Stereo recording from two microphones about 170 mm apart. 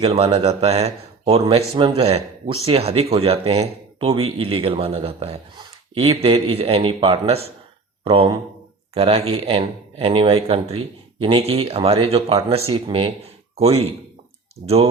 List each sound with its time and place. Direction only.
0.0 s speech: 35° right (ahead or behind)